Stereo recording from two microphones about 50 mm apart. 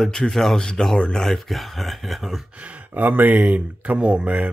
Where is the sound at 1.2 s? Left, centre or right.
Centre.